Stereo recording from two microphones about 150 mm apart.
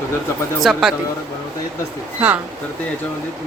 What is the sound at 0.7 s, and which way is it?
Speech, centre (ahead or behind).